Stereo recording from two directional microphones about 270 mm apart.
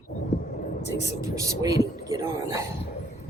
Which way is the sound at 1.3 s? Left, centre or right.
Centre.